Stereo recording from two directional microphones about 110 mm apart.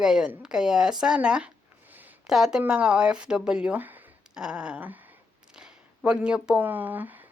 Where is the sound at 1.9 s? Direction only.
15° right (ahead or behind).